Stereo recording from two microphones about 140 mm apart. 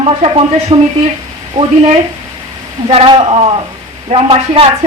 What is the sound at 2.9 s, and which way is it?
Speech, 40° right (ahead or behind).